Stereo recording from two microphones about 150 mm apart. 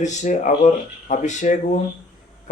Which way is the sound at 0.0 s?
55° left (ahead or behind).